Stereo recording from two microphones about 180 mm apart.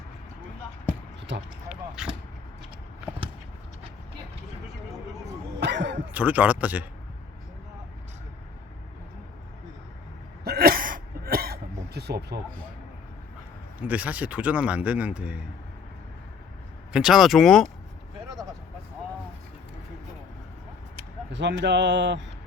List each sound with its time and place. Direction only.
1.7 s vehicle: 5° right (ahead or behind)
5.5 s cough: 75° right (ahead or behind)
6.1 s speech: 10° right (ahead or behind)
10.4 s throat clearing: 60° right (ahead or behind)
13.8 s speech: 10° right (ahead or behind)
16.9 s speech: 5° right (ahead or behind)
21.3 s speech: 75° right (ahead or behind)